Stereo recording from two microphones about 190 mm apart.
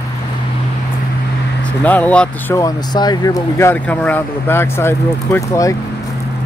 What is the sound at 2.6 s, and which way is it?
Speech, 20° left (ahead or behind).